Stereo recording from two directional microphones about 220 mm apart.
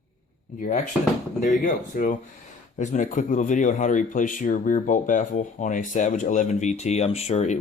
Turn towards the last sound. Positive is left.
turn(degrees=30)  # may be behind; listen again after turning